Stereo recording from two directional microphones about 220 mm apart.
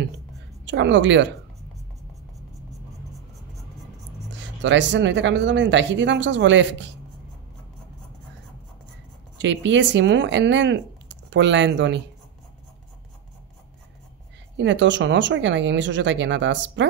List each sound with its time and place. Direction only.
0.7 s speech: 55° right (ahead or behind)
4.4 s speech: 55° right (ahead or behind)
9.4 s speech: 55° right (ahead or behind)
14.6 s speech: 55° right (ahead or behind)